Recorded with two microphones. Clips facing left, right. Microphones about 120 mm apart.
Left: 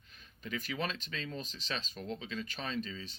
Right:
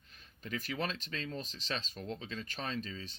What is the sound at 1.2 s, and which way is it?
Speech, 5° left (ahead or behind).